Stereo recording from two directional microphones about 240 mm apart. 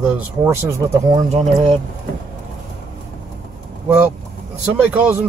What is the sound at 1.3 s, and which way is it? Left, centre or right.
Speech, right.